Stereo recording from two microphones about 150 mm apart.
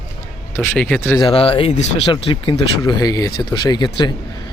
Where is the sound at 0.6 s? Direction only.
10° left (ahead or behind).